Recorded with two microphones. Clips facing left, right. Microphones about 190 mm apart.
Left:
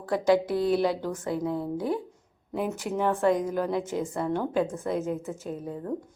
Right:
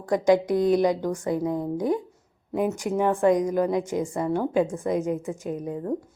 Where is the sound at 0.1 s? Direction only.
15° right (ahead or behind).